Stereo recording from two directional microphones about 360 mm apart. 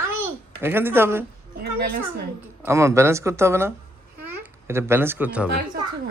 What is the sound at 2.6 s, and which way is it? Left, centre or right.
A child's voice, centre.